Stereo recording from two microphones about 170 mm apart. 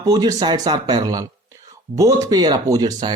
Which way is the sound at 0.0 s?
20° right (ahead or behind).